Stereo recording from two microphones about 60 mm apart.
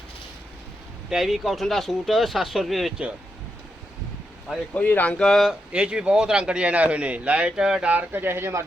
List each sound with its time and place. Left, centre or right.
1.1 s speech: centre
4.7 s speech: left
5.7 s a man's voice: centre
7.9 s speech: right